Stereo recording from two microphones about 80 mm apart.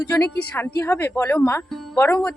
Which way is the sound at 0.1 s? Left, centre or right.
Left.